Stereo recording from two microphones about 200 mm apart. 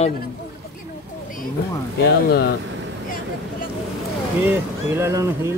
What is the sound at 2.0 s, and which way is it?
Speech, 55° left (ahead or behind).